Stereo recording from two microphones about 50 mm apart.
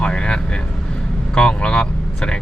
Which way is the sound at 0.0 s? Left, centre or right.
Centre.